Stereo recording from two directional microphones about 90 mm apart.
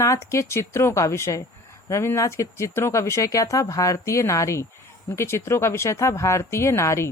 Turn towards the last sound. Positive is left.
turn(degrees=35)  # may be behind; listen again after turning